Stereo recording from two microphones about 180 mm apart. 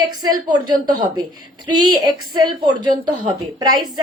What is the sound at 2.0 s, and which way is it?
A woman's voice, 25° right (ahead or behind).